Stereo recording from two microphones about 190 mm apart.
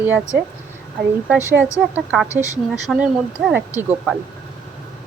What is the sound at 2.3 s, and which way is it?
Speech, 15° left (ahead or behind).